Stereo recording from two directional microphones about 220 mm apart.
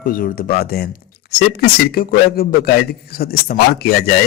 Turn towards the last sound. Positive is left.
turn(degrees=45)  # may be behind; listen again after turning